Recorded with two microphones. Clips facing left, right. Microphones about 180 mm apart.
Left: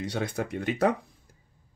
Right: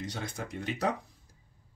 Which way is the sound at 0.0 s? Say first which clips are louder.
Left 7 dB; 65° left (ahead or behind).